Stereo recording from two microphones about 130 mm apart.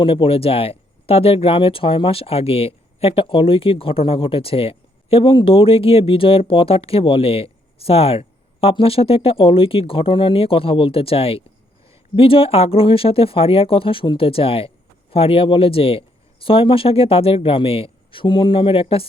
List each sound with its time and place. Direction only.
0.0 s speech: 45° left (ahead or behind)